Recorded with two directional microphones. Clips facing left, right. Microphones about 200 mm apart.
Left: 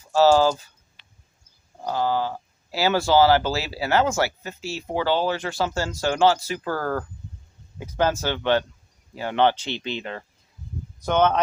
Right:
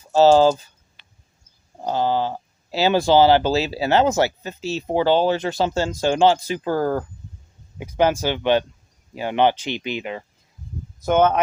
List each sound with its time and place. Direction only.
0.1 s speech: 20° right (ahead or behind)
1.8 s speech: 25° right (ahead or behind); by 11.3 s 10° right (ahead or behind)